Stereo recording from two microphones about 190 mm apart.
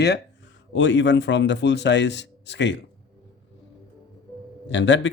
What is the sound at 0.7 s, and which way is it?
Speech, 75° left (ahead or behind).